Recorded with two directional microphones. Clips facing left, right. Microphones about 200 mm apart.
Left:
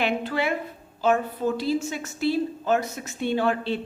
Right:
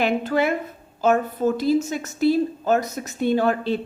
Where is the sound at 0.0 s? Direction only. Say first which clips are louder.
Right 4 dB; 45° right (ahead or behind).